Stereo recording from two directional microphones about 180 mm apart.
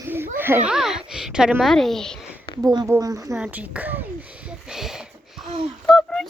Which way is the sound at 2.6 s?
20° right (ahead or behind).